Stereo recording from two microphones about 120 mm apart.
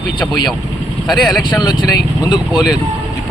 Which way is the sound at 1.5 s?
35° left (ahead or behind).